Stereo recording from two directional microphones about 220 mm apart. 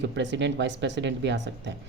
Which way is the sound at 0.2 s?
55° right (ahead or behind).